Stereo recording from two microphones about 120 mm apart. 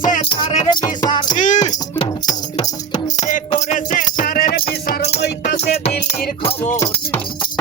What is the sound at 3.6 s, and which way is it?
Music, 80° left.